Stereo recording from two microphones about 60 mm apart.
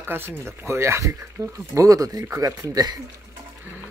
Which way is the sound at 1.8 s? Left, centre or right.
Right.